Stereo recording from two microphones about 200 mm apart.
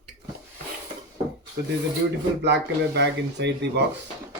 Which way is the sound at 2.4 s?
60° right (ahead or behind).